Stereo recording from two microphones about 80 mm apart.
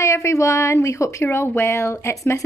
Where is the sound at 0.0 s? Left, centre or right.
Left.